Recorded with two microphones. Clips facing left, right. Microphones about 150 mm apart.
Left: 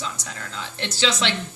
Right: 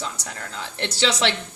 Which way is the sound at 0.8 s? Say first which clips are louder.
Right 2 dB; 35° right (ahead or behind).